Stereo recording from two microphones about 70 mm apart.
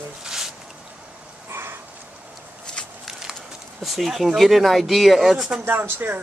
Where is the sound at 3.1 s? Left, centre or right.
Centre.